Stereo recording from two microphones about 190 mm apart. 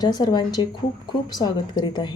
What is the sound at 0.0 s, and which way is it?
Speech, 20° left (ahead or behind).